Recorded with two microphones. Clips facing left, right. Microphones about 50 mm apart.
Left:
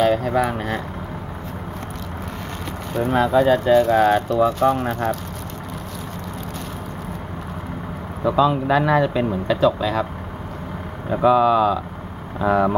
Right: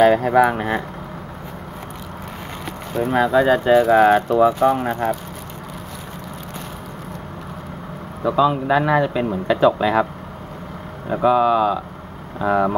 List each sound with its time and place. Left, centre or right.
0.0 s speech: centre
2.9 s speech: centre
3.3 s speech: centre
8.2 s speech: centre
11.1 s speech: centre